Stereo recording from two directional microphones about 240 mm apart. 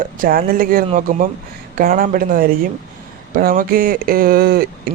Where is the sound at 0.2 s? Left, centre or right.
Right.